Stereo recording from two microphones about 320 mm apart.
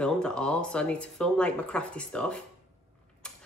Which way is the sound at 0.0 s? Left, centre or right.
Centre.